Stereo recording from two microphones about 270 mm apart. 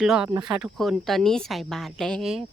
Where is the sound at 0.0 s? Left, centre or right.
Centre.